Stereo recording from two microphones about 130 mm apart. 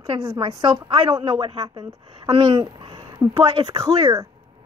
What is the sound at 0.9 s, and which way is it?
Speech, 45° right (ahead or behind).